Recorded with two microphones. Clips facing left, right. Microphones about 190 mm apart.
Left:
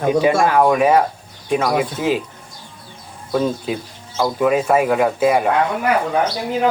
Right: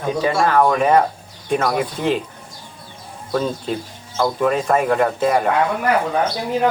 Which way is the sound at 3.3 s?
5° left (ahead or behind).